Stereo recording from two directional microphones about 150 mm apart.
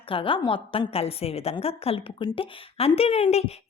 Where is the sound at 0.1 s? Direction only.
35° left (ahead or behind).